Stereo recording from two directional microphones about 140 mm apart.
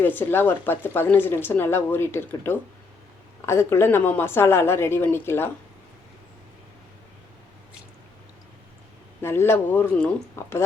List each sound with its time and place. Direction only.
0.0 s speech: 15° left (ahead or behind)
9.2 s speech: 15° left (ahead or behind)